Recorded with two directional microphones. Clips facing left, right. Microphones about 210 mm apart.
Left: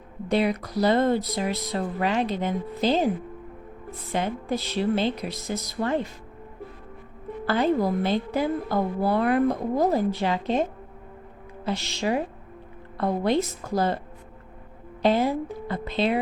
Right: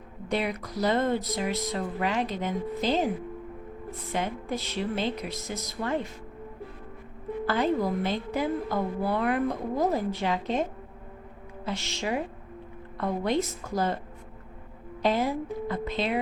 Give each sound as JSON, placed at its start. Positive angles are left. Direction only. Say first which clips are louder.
{"t": 0.3, "sound": "a woman's voice", "louder": "left 6 dB", "side_deg": 30}
{"t": 4.1, "sound": "a woman's voice", "louder": "left 4 dB", "side_deg": 30}
{"t": 7.4, "sound": "a woman's voice", "louder": "left 3 dB", "side_deg": 30}
{"t": 15.0, "sound": "a woman's voice", "louder": "left 4 dB", "side_deg": 30}